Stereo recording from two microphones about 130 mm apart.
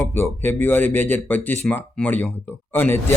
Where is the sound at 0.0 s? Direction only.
15° left (ahead or behind).